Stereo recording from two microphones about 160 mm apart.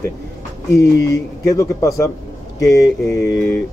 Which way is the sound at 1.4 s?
20° left (ahead or behind).